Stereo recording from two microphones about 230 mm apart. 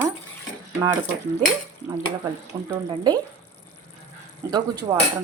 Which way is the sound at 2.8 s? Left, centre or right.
Centre.